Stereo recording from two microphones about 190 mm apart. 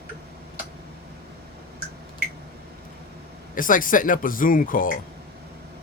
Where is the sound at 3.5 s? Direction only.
45° left (ahead or behind).